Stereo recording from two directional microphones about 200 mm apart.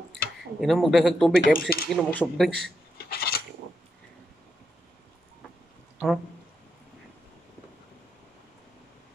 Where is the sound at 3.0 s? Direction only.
50° left (ahead or behind).